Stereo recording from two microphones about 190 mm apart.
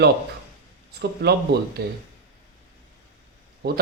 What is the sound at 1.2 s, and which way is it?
Speech, 55° right (ahead or behind).